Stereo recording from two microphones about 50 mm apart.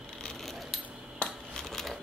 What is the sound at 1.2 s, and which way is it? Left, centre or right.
Coin, left.